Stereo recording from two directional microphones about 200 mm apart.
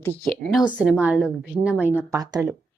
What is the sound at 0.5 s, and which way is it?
A woman's voice, 5° right (ahead or behind).